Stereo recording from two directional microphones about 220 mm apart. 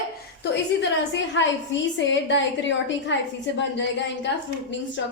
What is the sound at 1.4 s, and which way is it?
A woman's voice, 55° left (ahead or behind).